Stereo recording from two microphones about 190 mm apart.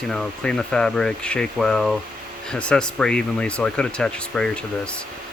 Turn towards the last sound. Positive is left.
turn(degrees=5)  # may be behind; listen again after turning